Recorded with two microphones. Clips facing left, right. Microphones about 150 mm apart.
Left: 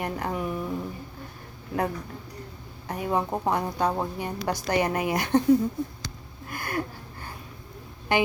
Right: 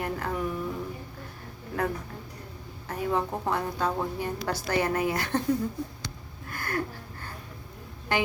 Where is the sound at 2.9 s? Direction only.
15° left (ahead or behind).